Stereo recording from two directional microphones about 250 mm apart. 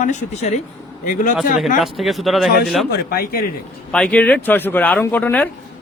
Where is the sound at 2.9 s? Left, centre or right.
Left.